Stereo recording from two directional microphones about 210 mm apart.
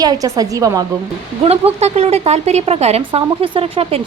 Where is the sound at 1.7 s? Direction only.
30° right (ahead or behind).